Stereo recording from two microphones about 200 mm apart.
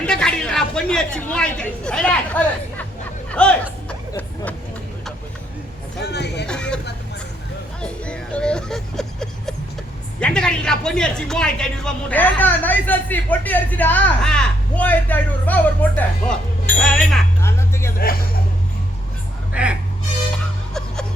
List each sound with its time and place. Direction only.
0.0 s a woman's voice: 5° left (ahead or behind)
6.0 s a sound: 55° left (ahead or behind)
6.5 s vehicle: 5° left (ahead or behind)
7.8 s vehicle: 5° left (ahead or behind)
10.2 s speech: 5° left (ahead or behind)
17.4 s music: 15° left (ahead or behind)
19.6 s speech: 5° right (ahead or behind)